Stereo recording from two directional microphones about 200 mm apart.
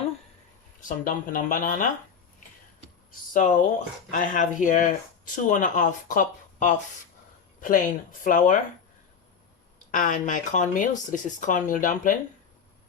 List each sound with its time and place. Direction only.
0.8 s speech: 45° left (ahead or behind)
2.8 s a sound: 40° left (ahead or behind)
4.1 s speech: 40° left (ahead or behind)
9.7 s speech: 40° left (ahead or behind)